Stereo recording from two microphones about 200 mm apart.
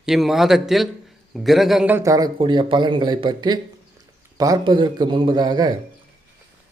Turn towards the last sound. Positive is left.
turn(degrees=-20)  # may be behind; listen again after turning